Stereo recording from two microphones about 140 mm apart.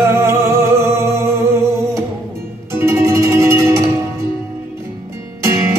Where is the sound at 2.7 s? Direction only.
20° right (ahead or behind).